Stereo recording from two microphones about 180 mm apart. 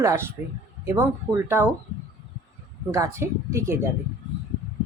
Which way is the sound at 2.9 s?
15° right (ahead or behind).